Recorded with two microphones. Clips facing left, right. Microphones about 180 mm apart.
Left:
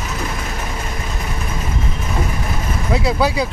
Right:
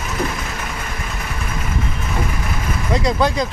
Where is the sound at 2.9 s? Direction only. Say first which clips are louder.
Even; 5° left (ahead or behind).